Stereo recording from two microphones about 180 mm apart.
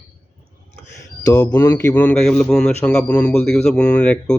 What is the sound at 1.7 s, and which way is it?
A man's voice, 10° left (ahead or behind).